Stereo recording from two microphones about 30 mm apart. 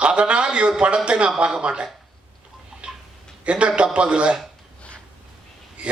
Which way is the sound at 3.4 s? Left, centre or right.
Right.